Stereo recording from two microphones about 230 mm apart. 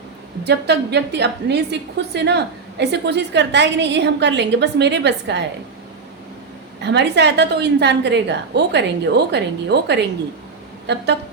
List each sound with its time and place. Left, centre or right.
0.4 s a woman's voice: right
6.8 s a woman's voice: right